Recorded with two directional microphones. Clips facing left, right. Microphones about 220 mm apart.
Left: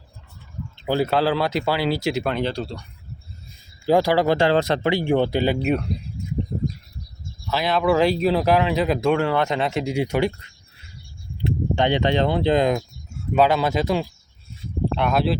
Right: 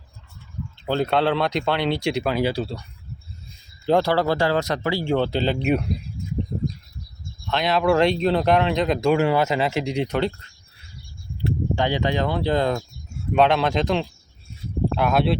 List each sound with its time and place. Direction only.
0.9 s speech: 5° left (ahead or behind)
3.8 s speech: 10° left (ahead or behind)
7.4 s speech: centre (ahead or behind)
11.3 s speech: 20° left (ahead or behind)
13.3 s speech: 5° left (ahead or behind)